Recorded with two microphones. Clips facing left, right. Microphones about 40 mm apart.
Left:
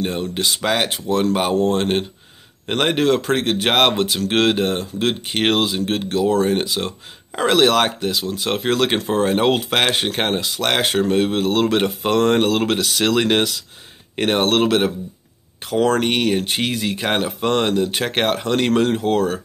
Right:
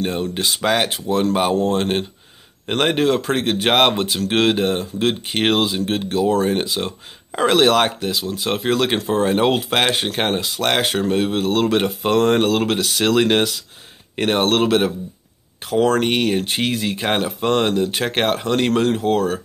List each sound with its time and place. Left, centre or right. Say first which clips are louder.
0.0 s speech: even; centre